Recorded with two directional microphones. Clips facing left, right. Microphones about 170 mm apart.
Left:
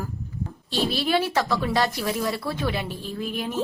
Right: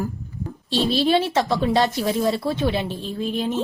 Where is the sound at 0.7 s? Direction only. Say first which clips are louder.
Right 5 dB; 30° right (ahead or behind).